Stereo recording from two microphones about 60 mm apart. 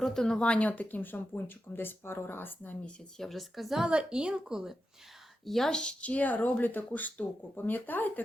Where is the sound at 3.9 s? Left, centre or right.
Centre.